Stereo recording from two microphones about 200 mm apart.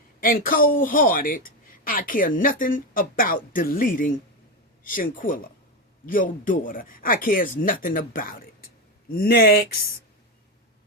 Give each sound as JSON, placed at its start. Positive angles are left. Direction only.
{"t": 0.2, "sound": "speech", "side_deg": 45}